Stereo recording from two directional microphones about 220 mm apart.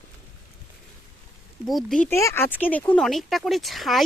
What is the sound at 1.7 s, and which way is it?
Speech, centre (ahead or behind).